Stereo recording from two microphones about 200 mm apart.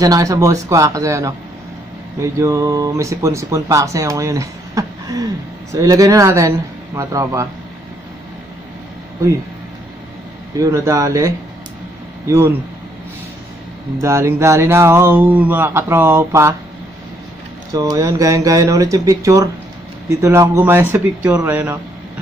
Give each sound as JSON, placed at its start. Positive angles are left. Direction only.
{"t": 0.0, "sound": "speech", "side_deg": -15}
{"t": 10.6, "sound": "speech", "side_deg": -15}
{"t": 14.0, "sound": "speech", "side_deg": -15}
{"t": 17.7, "sound": "speech", "side_deg": -20}